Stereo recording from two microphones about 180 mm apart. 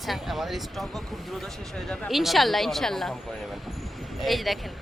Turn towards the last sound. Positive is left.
turn(degrees=0)  # may be behind; listen again after turning